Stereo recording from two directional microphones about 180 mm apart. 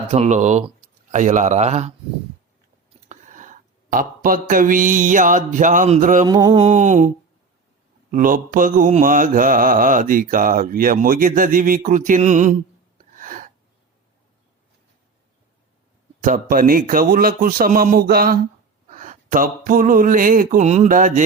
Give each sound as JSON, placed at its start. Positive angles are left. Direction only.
{"t": 0.1, "sound": "speech", "side_deg": -40}
{"t": 3.1, "sound": "a sound", "side_deg": -45}
{"t": 6.2, "sound": "mantra", "side_deg": -20}
{"t": 6.6, "sound": "speech", "side_deg": -40}
{"t": 8.1, "sound": "mantra", "side_deg": -50}
{"t": 13.1, "sound": "gasp", "side_deg": -50}
{"t": 16.2, "sound": "mantra", "side_deg": -50}
{"t": 18.9, "sound": "a sound", "side_deg": -45}